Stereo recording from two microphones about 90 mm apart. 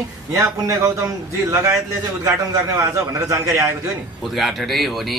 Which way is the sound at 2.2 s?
35° right (ahead or behind).